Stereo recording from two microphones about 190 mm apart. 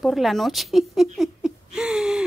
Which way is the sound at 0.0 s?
Centre (ahead or behind).